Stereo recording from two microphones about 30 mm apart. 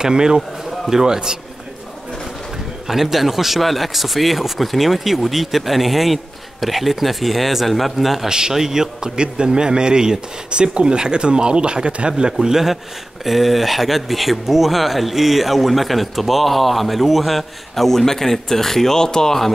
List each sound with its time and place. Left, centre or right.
0.0 s speech: right
2.5 s a man's voice: centre
8.3 s speech: right; by 19.3 s left